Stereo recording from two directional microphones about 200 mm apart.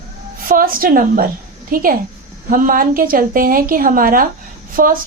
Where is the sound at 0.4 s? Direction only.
45° right (ahead or behind).